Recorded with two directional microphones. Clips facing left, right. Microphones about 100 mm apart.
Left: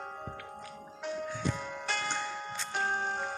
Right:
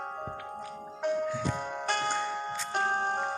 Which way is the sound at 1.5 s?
55° right (ahead or behind).